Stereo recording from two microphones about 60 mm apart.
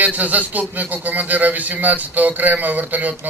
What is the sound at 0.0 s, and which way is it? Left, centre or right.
Speech, right.